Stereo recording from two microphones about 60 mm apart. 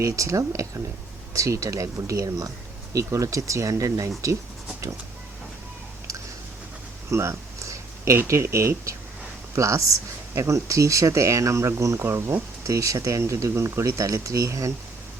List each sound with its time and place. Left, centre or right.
0.0 s speech: right
2.9 s speech: right
7.1 s a sound: right
8.3 s speech: right
9.6 s speech: right
12.6 s speech: right